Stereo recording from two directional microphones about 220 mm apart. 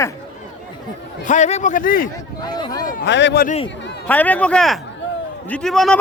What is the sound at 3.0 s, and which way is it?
Speech, 55° left (ahead or behind).